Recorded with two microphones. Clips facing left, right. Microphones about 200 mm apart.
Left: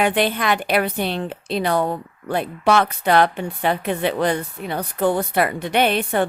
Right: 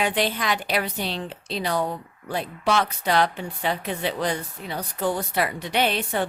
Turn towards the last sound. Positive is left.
turn(degrees=55)  # may be behind; listen again after turning